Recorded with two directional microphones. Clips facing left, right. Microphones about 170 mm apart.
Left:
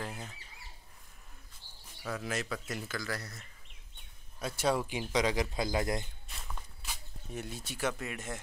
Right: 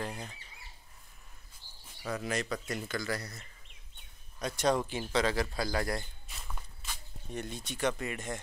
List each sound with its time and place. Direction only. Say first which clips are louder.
0.0 s speech: right 2 dB; centre (ahead or behind)
2.0 s speech: right 2 dB; centre (ahead or behind); by 6.0 s 20° left (ahead or behind)
6.2 s a sound: even; centre (ahead or behind)